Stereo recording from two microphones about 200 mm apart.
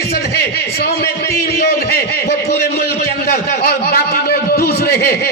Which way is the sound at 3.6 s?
50° left (ahead or behind).